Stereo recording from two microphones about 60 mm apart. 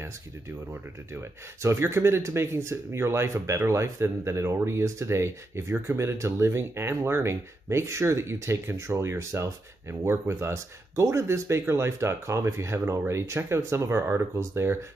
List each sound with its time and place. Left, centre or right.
1.6 s speech: right